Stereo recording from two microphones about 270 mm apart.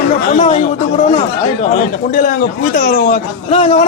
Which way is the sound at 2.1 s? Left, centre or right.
Left.